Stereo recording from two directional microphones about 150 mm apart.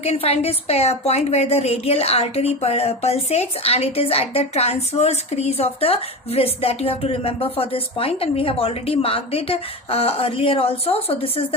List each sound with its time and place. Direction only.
0.0 s a woman's voice: 45° left (ahead or behind)